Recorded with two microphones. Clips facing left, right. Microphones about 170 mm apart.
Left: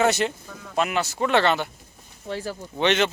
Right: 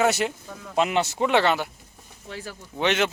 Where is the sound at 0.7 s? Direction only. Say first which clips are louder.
Right 2 dB; 20° right (ahead or behind).